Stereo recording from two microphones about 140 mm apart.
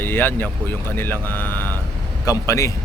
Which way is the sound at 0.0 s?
15° left (ahead or behind).